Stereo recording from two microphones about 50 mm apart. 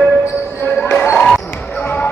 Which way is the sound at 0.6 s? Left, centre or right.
Left.